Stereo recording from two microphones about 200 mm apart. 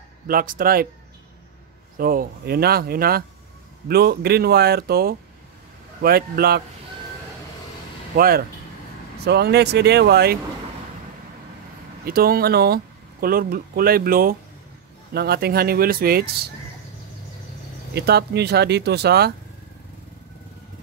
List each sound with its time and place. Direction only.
0.3 s speech: 45° right (ahead or behind)
2.0 s speech: 45° right (ahead or behind)
8.2 s speech: 50° right (ahead or behind)
12.0 s speech: 50° right (ahead or behind)
17.9 s speech: 55° right (ahead or behind)